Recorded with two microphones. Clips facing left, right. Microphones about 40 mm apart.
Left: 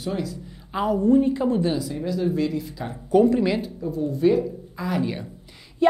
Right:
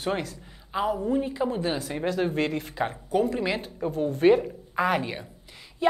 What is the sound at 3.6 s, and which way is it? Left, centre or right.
Speech, right.